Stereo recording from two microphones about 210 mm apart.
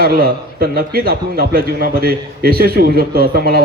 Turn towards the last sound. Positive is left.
turn(degrees=-45)  # may be behind; listen again after turning